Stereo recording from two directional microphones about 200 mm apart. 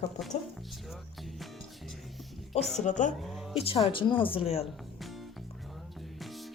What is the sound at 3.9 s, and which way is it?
Speech, 25° left (ahead or behind).